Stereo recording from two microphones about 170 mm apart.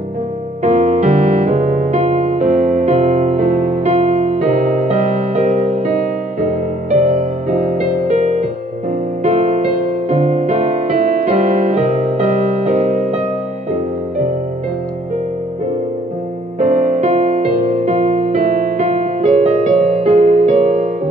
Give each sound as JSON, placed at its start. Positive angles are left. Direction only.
{"t": 0.7, "sound": "music", "side_deg": -45}
{"t": 16.5, "sound": "music", "side_deg": -45}